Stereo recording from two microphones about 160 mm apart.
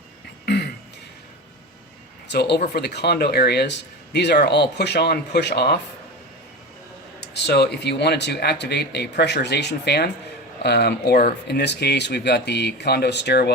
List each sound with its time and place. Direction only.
0.4 s throat clearing: 90° left
2.2 s speech: 90° left
7.3 s speech: 90° left